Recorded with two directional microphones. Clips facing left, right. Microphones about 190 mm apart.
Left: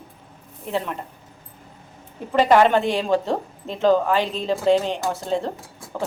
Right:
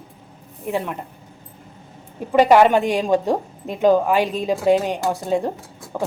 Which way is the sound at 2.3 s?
10° right (ahead or behind).